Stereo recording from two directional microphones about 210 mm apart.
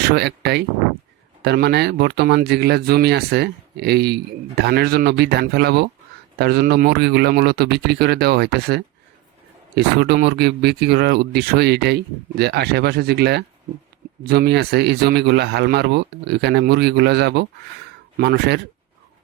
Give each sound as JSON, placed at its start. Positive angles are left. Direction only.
{"t": 0.0, "sound": "speech", "side_deg": -50}